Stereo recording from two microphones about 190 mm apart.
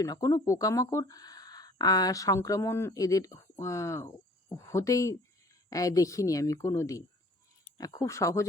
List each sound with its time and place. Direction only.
0.0 s speech: 20° left (ahead or behind)